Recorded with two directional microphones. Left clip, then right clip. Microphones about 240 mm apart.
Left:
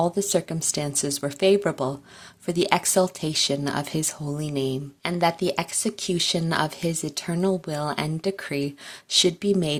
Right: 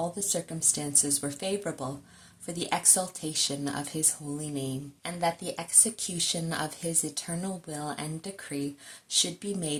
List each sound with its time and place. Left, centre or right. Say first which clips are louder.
0.3 s speech: left 6 dB; left